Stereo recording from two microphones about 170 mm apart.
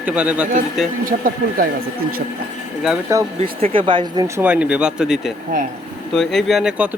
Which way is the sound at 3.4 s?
30° right (ahead or behind).